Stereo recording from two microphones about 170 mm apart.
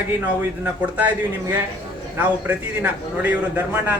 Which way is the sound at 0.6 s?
10° right (ahead or behind).